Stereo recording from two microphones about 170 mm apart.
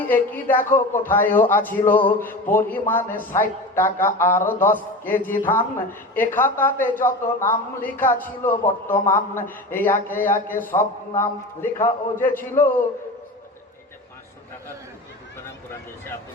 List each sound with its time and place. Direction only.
0.0 s a man's voice: 10° left (ahead or behind)